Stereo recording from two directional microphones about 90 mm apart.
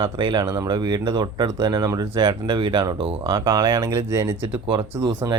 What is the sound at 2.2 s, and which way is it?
Speech, 60° right (ahead or behind).